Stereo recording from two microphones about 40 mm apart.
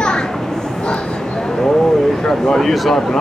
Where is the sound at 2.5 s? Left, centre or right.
Centre.